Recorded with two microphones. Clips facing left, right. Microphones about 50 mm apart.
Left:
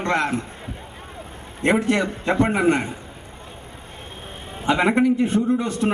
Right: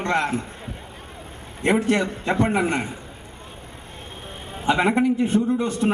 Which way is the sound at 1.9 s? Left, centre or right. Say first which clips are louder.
Left 1 dB; centre.